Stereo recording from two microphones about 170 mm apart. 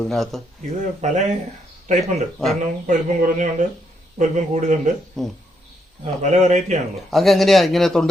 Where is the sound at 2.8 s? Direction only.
50° right (ahead or behind).